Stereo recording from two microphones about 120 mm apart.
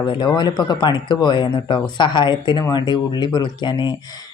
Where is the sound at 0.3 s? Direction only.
35° left (ahead or behind).